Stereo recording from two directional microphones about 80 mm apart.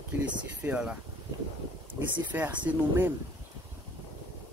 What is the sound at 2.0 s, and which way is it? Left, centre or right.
Speech, right.